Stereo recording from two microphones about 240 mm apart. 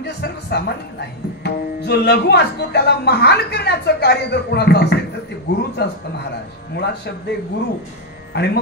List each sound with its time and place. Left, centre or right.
0.0 s a woman's voice: left
8.3 s speech: left